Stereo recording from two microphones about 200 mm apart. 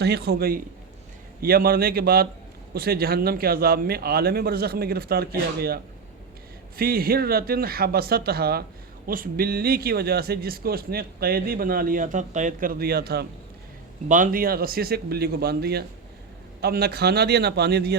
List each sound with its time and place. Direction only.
0.0 s a man's voice: 55° right (ahead or behind)